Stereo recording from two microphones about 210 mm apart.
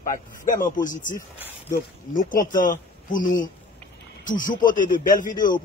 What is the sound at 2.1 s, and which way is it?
Speech, 40° left (ahead or behind).